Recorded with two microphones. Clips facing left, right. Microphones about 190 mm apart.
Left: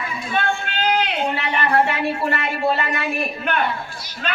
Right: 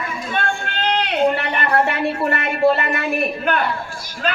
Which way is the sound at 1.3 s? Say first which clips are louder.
Even; 50° right (ahead or behind).